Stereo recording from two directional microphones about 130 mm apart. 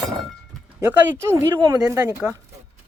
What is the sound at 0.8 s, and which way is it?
Speech, 15° right (ahead or behind).